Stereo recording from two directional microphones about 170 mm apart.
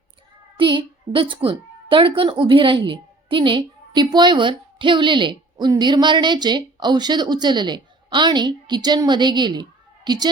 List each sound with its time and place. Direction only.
0.5 s a woman's voice: 30° right (ahead or behind)